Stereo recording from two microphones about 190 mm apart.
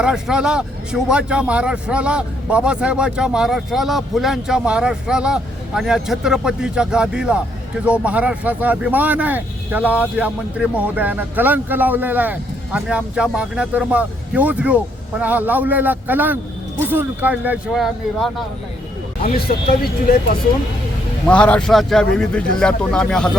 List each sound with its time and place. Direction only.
0.0 s a man's voice: 5° right (ahead or behind)
19.3 s speech: 50° left (ahead or behind)
21.2 s a man's voice: 5° left (ahead or behind)